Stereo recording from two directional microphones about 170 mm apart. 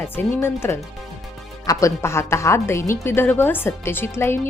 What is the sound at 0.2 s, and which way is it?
A woman's voice, 15° left (ahead or behind).